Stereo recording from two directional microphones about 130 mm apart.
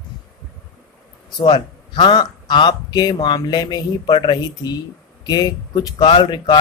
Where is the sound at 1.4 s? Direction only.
35° left (ahead or behind).